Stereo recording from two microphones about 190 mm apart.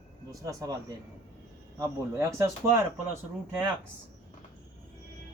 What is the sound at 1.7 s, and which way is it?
Speech, 15° right (ahead or behind).